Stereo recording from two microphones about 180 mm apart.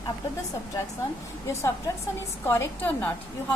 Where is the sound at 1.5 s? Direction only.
15° left (ahead or behind).